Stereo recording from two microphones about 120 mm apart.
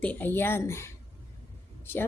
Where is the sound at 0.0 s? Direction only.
15° left (ahead or behind).